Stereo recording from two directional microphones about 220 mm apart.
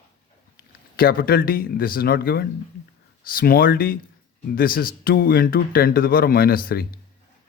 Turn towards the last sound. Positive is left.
turn(degrees=45)  # may be behind; listen again after turning